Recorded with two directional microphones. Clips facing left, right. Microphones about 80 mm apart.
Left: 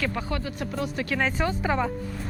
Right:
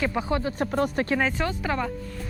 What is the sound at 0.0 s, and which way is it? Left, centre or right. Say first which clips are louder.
Speech: right 4 dB; centre.